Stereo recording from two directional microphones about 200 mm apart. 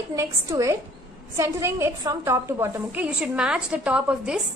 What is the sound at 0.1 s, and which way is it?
A woman's voice, 15° right (ahead or behind).